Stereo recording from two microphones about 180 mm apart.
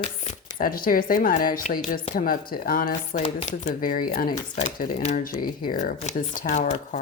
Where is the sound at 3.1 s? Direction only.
40° left (ahead or behind).